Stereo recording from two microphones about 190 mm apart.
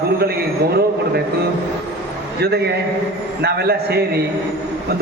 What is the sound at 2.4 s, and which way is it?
A man's voice, 60° right (ahead or behind).